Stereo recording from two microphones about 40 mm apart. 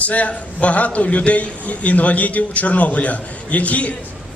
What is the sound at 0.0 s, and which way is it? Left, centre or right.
A man's voice, left.